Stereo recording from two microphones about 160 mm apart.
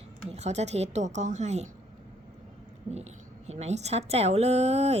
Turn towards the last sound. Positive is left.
turn(degrees=-40)  # may be behind; listen again after turning